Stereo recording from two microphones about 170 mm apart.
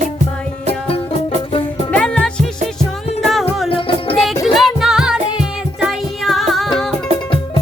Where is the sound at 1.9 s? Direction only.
5° left (ahead or behind).